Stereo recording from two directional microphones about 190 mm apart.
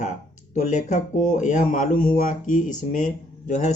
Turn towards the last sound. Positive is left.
turn(degrees=40)  # may be behind; listen again after turning